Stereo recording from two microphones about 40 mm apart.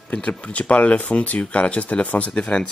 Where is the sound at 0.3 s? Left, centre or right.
Left.